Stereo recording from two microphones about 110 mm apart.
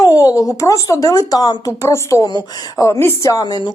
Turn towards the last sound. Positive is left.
turn(degrees=40)  # may be behind; listen again after turning